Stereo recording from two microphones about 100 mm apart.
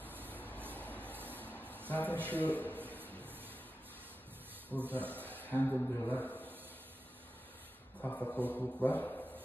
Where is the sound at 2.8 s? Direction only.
20° right (ahead or behind).